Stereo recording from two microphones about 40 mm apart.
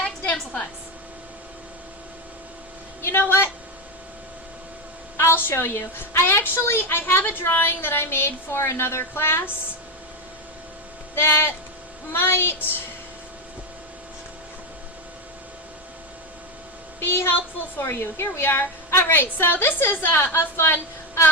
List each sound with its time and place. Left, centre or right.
3.0 s a woman's voice: left
5.2 s a woman's voice: left
7.1 s a woman's voice: left
11.1 s a woman's voice: left
17.0 s a woman's voice: left